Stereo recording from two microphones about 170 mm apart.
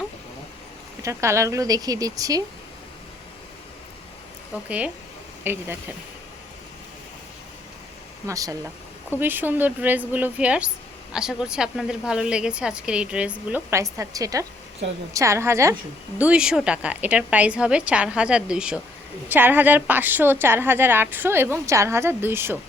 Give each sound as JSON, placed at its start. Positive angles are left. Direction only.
{"t": 1.0, "sound": "a woman's voice", "side_deg": -15}
{"t": 5.4, "sound": "speech", "side_deg": -15}
{"t": 8.3, "sound": "a woman's voice", "side_deg": -20}